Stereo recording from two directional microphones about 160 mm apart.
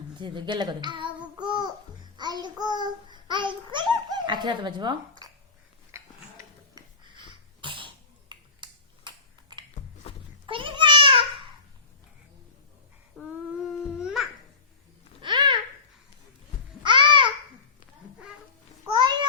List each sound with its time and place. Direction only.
0.2 s a child's voice: 30° right (ahead or behind)
5.2 s a sound: 25° right (ahead or behind)
7.0 s sneeze: 30° right (ahead or behind)
10.0 s a sound: 35° left (ahead or behind)
10.4 s a sound: 30° right (ahead or behind)
13.2 s humming: centre (ahead or behind)
13.7 s babbling: 5° right (ahead or behind)
15.2 s babbling: 30° right (ahead or behind)
16.8 s babbling: 30° right (ahead or behind)
18.9 s babbling: 25° right (ahead or behind)